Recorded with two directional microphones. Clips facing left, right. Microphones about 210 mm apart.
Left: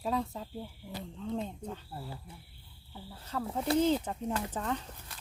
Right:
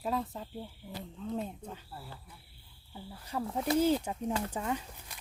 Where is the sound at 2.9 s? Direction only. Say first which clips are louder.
Even; 10° right (ahead or behind).